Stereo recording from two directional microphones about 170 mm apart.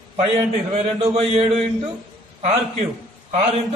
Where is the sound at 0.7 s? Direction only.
35° right (ahead or behind).